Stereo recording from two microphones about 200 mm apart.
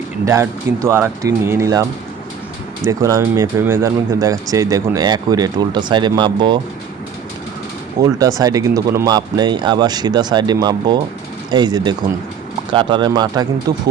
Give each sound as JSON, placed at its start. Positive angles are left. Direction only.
{"t": 0.3, "sound": "speech", "side_deg": -15}
{"t": 8.0, "sound": "speech", "side_deg": -15}